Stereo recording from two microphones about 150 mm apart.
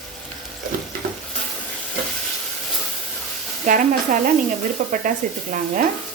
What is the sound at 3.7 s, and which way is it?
A woman's voice, 60° right (ahead or behind).